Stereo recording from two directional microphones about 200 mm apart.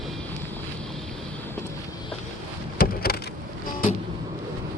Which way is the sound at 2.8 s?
50° left (ahead or behind).